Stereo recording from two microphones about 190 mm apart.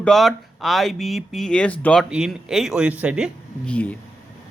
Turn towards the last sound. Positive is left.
turn(degrees=5)  # may be behind; listen again after turning